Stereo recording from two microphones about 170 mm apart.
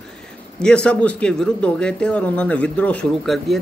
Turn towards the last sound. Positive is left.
turn(degrees=5)  # may be behind; listen again after turning